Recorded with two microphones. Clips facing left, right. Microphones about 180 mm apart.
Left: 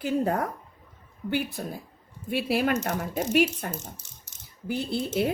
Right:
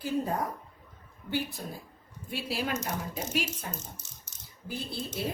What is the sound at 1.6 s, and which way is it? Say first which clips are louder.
Speech: left 5 dB; 55° left (ahead or behind).